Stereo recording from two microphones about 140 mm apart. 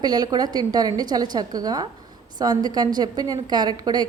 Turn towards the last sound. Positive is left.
turn(degrees=-30)  # may be behind; listen again after turning